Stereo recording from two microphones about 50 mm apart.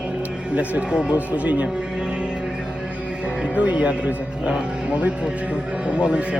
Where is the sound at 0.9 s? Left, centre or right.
Centre.